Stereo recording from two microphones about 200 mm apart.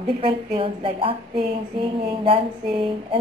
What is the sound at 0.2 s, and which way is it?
Speech, 25° right (ahead or behind).